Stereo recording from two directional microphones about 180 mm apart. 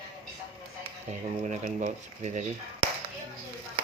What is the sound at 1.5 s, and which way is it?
Speech, 40° right (ahead or behind).